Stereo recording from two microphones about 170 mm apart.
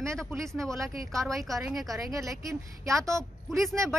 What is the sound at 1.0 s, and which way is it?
Speech, 20° right (ahead or behind).